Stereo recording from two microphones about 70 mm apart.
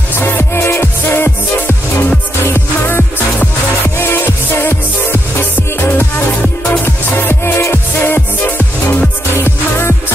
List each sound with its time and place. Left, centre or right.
0.2 s music: left